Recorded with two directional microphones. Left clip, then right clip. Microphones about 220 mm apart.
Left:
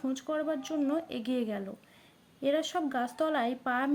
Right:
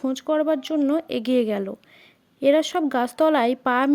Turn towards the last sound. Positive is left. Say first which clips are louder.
# right 10 dB
turn(degrees=-50)  # may be behind; listen again after turning